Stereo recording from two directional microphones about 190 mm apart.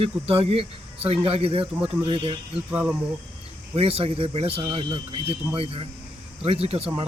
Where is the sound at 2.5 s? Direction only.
5° right (ahead or behind).